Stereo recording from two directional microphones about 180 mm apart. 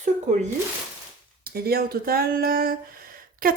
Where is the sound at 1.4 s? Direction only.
55° right (ahead or behind).